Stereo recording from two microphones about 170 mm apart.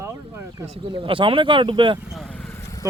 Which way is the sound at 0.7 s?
30° right (ahead or behind).